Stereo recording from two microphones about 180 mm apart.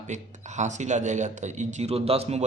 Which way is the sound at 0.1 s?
40° right (ahead or behind).